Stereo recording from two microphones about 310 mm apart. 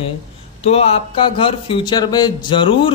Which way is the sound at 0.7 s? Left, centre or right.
Centre.